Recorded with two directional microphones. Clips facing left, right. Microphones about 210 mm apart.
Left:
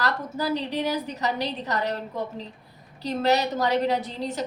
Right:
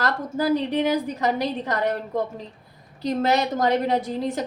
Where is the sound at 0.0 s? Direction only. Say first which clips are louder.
Right 3 dB; 50° right (ahead or behind).